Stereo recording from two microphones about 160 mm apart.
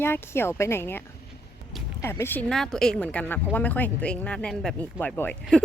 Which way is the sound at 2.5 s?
5° left (ahead or behind).